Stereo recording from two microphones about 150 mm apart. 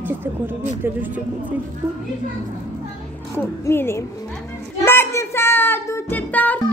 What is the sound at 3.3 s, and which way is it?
Speech, 15° left (ahead or behind).